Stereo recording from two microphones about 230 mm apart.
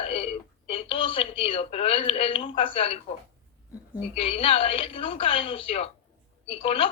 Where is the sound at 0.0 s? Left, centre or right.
Left.